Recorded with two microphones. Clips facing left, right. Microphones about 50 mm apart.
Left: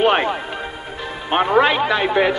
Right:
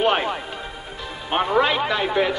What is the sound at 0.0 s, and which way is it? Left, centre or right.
Music, left.